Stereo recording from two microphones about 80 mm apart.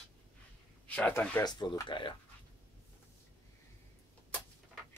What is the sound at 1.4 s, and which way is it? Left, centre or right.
Speech, left.